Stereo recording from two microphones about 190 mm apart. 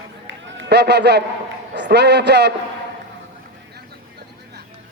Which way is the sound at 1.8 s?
60° right (ahead or behind).